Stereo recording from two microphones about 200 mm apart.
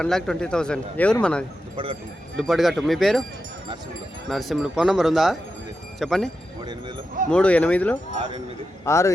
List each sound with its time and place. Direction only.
0.0 s speech: 5° left (ahead or behind)
1.7 s speech: 25° right (ahead or behind)
2.4 s speech: centre (ahead or behind)
4.3 s speech: centre (ahead or behind)